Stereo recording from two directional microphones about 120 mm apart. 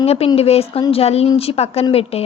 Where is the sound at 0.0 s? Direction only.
55° left (ahead or behind).